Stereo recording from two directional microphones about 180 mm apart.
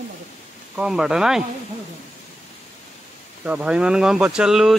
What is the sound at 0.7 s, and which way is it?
Speech, 5° right (ahead or behind).